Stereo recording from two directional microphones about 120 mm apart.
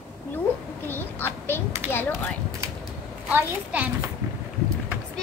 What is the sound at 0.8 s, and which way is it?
A child's voice, 15° left (ahead or behind).